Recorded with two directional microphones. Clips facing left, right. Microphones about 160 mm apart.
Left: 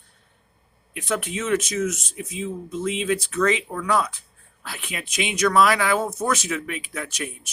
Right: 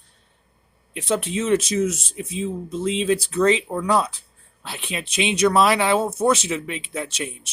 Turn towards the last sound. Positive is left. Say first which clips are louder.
# right 2 dB
turn(degrees=-30)  # may be behind; listen again after turning